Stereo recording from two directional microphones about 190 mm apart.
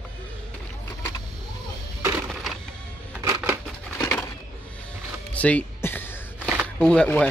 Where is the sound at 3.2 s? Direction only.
15° right (ahead or behind).